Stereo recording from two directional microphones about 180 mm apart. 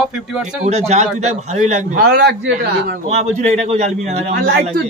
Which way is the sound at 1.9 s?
65° right (ahead or behind).